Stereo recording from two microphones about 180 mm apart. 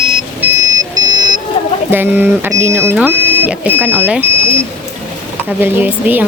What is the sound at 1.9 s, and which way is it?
Speech, 10° right (ahead or behind).